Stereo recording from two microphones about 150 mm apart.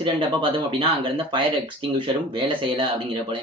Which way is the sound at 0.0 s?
35° right (ahead or behind).